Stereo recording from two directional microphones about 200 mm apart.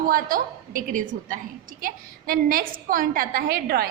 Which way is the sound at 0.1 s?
45° right (ahead or behind).